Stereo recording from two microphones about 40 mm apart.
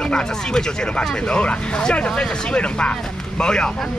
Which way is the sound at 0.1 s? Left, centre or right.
Centre.